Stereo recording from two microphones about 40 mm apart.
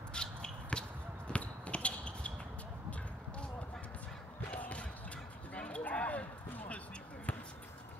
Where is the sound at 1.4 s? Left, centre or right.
Left.